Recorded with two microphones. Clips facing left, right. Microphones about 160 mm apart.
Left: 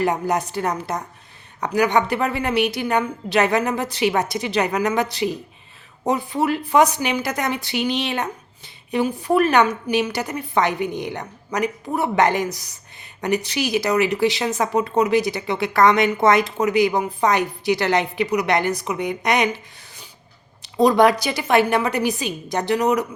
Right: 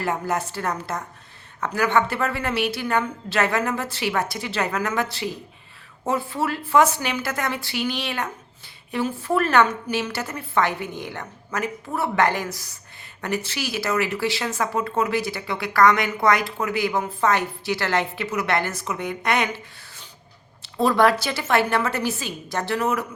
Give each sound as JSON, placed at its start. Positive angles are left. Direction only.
{"t": 0.0, "sound": "a woman's voice", "side_deg": 15}